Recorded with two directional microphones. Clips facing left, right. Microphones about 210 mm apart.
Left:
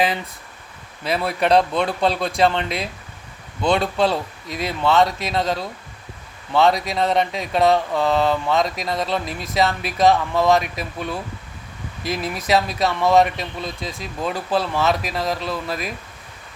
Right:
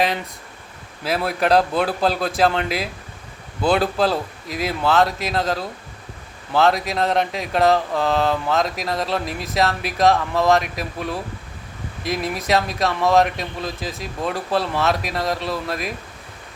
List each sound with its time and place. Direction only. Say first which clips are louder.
1.0 s speech: even; centre (ahead or behind)